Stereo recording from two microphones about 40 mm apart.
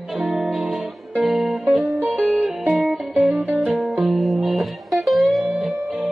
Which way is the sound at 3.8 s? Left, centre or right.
Centre.